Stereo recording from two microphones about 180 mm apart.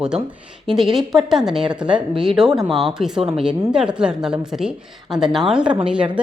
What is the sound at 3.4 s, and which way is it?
Speech, 5° right (ahead or behind).